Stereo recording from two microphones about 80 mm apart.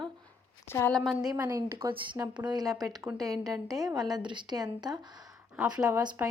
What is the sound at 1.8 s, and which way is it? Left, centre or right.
A woman's voice, right.